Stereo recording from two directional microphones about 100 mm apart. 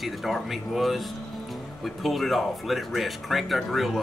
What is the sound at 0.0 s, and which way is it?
Speech, centre (ahead or behind).